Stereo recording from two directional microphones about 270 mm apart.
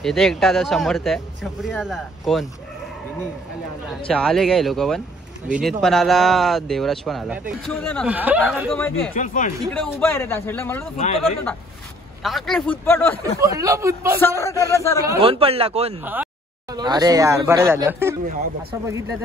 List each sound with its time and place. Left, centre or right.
0.0 s speech: centre
4.1 s speech: centre
8.1 s speech: centre
8.7 s a man's voice: centre
9.1 s speech: left
9.7 s a man's voice: centre
12.2 s speech: centre
13.2 s speech: centre
14.2 s a man's voice: centre
15.0 s speech: right
16.0 s speech: centre